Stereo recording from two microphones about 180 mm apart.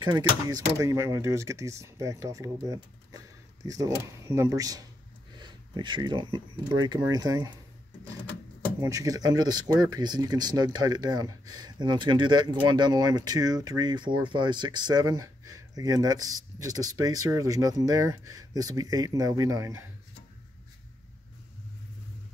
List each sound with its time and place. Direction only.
0.0 s speech: 25° right (ahead or behind)
8.8 s speech: 20° right (ahead or behind)